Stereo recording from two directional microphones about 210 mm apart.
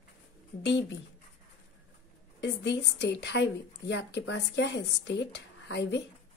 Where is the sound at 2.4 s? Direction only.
55° left (ahead or behind).